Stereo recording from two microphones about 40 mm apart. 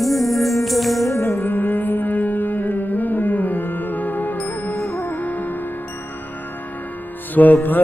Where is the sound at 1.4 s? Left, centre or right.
Left.